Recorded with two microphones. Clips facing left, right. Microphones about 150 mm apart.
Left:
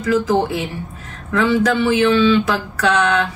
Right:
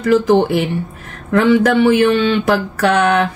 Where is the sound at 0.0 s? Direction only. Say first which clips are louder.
Right 5 dB; 65° right (ahead or behind).